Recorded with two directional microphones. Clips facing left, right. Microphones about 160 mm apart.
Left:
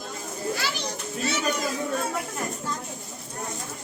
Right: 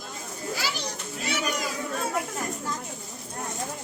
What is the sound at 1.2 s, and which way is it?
Cat, 15° right (ahead or behind).